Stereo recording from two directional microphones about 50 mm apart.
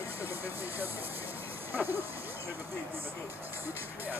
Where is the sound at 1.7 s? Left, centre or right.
Right.